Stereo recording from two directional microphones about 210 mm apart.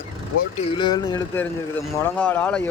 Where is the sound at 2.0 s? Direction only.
10° left (ahead or behind).